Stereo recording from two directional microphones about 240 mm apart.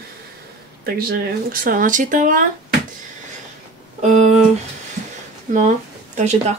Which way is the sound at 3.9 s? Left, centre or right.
Right.